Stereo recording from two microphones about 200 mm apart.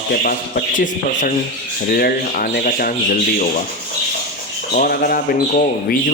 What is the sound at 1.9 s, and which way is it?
Speech, 45° left (ahead or behind).